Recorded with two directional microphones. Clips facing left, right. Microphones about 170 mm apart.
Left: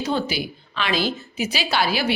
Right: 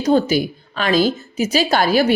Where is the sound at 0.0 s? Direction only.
45° right (ahead or behind).